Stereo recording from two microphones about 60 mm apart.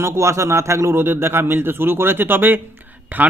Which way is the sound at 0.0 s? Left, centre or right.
Right.